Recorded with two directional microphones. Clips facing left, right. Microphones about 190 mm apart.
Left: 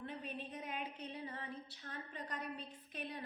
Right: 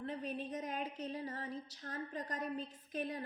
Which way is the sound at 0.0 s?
40° right (ahead or behind).